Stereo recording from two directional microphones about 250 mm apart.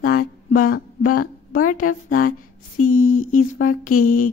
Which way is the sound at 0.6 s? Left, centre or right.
Left.